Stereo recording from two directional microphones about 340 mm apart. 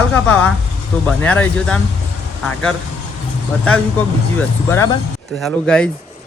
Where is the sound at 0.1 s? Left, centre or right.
Centre.